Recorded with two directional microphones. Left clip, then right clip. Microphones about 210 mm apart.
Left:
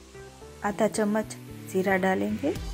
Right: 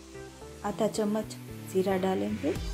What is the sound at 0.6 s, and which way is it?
A woman's voice, 10° left (ahead or behind).